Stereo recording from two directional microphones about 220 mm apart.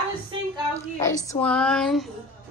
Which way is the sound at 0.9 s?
15° left (ahead or behind).